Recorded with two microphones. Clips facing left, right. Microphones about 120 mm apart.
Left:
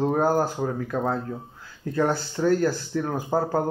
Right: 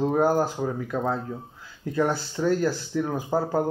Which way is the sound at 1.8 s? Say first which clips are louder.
Left 1 dB; 20° right (ahead or behind).